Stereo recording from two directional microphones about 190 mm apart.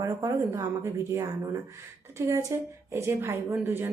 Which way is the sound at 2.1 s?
15° right (ahead or behind).